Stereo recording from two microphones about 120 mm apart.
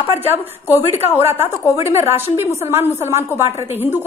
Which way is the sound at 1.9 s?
20° right (ahead or behind).